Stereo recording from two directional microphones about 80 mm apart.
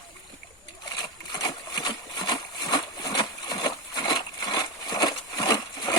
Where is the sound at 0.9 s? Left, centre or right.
Left.